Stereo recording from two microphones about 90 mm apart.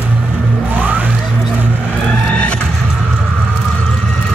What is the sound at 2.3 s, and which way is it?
Vehicle, 15° left (ahead or behind).